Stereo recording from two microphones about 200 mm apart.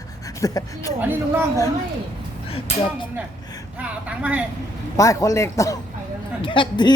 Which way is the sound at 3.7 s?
5° right (ahead or behind).